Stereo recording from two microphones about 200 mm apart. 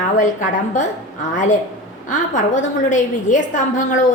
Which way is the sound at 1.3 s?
40° left (ahead or behind).